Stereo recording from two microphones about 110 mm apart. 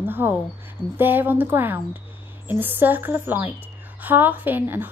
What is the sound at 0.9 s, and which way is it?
A woman's voice, 20° right (ahead or behind).